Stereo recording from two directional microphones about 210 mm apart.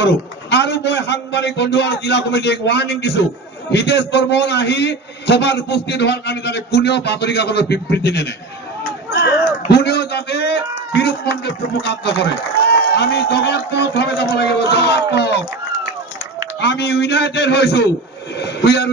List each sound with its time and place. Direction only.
0.0 s a man's voice: 55° left (ahead or behind)
16.6 s a man's voice: 55° left (ahead or behind)